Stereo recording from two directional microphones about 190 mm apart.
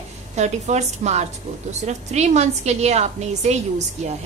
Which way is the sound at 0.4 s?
35° right (ahead or behind).